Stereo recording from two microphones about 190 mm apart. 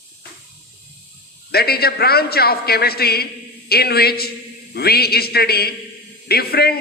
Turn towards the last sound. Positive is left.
turn(degrees=55)  # may be behind; listen again after turning